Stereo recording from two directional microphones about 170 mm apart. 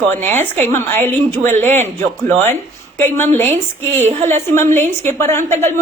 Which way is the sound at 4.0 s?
45° right (ahead or behind).